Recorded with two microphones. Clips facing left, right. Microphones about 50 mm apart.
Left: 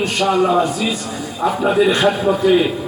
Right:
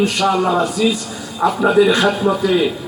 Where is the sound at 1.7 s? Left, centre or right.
Centre.